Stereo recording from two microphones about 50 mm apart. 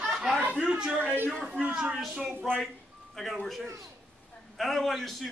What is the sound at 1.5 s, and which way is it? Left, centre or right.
Speech, right.